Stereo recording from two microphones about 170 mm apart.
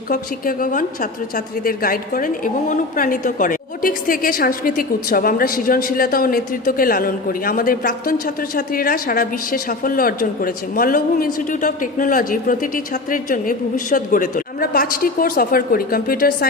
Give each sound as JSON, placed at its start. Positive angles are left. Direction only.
{"t": 0.1, "sound": "a woman's voice", "side_deg": 55}